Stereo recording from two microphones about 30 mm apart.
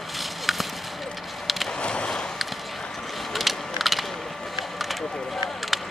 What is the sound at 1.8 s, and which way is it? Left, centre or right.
Vehicle, left.